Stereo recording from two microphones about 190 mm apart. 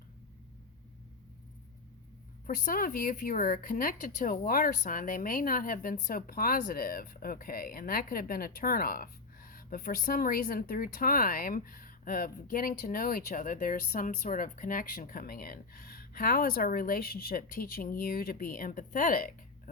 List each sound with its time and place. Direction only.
2.5 s speech: 45° left (ahead or behind)